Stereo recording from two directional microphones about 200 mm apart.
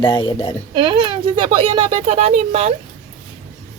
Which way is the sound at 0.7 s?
25° right (ahead or behind).